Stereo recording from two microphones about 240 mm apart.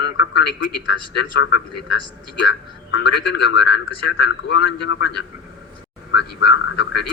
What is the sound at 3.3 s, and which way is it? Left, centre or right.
Speech, left.